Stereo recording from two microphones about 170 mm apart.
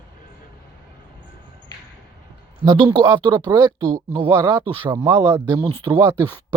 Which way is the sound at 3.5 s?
20° right (ahead or behind).